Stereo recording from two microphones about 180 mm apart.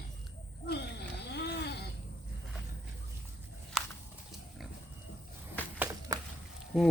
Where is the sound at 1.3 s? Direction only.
65° left (ahead or behind).